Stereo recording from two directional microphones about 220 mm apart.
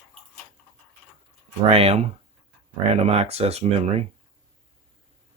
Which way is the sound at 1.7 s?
25° right (ahead or behind).